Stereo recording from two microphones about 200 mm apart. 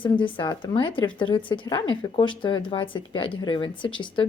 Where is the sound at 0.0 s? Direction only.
25° left (ahead or behind).